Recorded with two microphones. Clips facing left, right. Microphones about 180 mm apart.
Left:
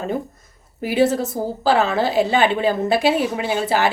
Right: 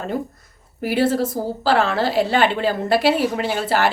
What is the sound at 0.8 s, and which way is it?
A woman's voice, 20° left (ahead or behind).